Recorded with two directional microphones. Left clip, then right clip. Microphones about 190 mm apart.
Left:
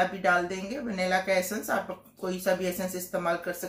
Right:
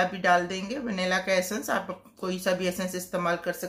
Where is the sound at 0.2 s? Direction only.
45° right (ahead or behind).